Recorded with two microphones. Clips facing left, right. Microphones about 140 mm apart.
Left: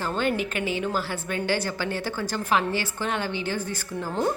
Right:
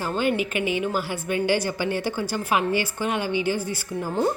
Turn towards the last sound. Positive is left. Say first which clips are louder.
# right 2 dB
turn(degrees=-10)  # may be behind; listen again after turning